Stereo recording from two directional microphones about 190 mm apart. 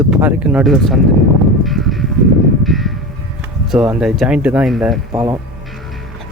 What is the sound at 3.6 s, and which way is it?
Speech, 5° right (ahead or behind).